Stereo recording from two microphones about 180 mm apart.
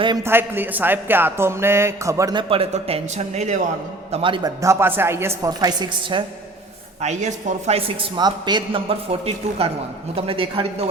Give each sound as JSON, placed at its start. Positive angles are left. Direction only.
{"t": 0.0, "sound": "a man's voice", "side_deg": -25}
{"t": 0.3, "sound": "speech", "side_deg": -10}
{"t": 4.1, "sound": "a man's voice", "side_deg": -30}
{"t": 4.6, "sound": "speech", "side_deg": -15}
{"t": 7.0, "sound": "a woman's voice", "side_deg": -40}